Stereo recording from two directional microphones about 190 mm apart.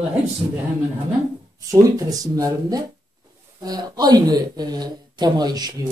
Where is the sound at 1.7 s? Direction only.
20° right (ahead or behind).